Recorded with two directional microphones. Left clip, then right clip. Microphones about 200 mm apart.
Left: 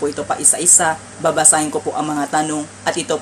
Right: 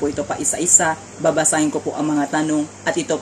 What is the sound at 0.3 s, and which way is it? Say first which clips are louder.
A woman's voice: left 2 dB; 15° right (ahead or behind).